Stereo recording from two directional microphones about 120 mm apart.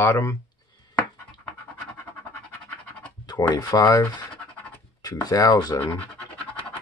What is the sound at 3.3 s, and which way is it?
Speech, 35° left (ahead or behind).